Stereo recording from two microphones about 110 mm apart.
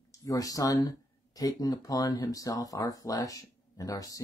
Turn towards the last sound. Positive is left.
turn(degrees=35)  # may be behind; listen again after turning